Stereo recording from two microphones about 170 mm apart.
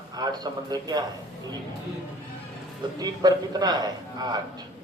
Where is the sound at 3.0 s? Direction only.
25° right (ahead or behind).